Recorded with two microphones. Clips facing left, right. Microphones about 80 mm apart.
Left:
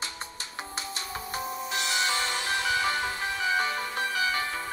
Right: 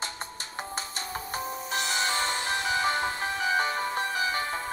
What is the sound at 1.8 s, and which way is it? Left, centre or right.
Music, right.